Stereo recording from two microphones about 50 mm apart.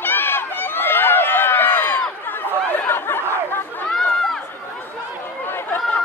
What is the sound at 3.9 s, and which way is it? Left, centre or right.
Run, centre.